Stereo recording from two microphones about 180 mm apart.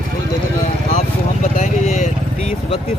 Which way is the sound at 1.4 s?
45° left (ahead or behind).